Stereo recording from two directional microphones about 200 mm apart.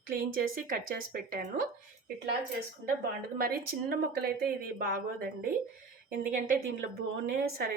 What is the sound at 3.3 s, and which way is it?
Speech, 50° right (ahead or behind).